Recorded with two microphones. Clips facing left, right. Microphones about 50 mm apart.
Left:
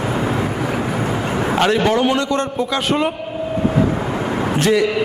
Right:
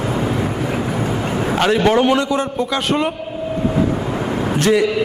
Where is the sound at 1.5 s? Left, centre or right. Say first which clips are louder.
Right 2 dB; centre.